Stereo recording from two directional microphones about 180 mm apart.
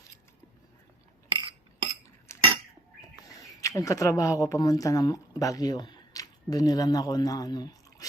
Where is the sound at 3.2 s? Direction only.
20° left (ahead or behind).